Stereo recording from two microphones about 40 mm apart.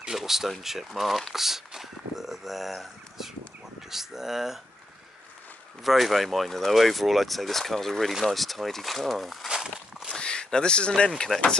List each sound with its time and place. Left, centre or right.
0.0 s a sound: centre
0.7 s speech: centre
5.9 s speech: centre
9.5 s walk: centre
10.1 s a sound: centre
11.1 s speech: centre